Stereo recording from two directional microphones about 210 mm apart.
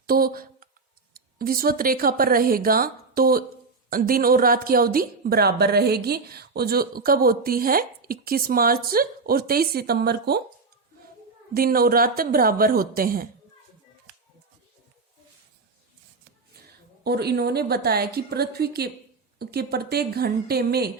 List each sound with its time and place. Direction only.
0.1 s a woman's voice: 45° right (ahead or behind)
11.5 s a woman's voice: 45° right (ahead or behind)
17.0 s a woman's voice: 50° right (ahead or behind)